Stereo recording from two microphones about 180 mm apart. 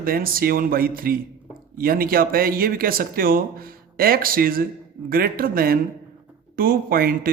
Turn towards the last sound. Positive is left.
turn(degrees=-55)  # may be behind; listen again after turning